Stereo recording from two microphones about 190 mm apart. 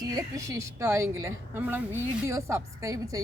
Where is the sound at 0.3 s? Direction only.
15° right (ahead or behind).